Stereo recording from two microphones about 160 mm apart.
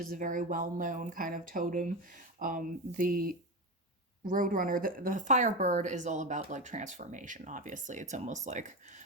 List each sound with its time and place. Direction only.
0.0 s speech: 60° right (ahead or behind)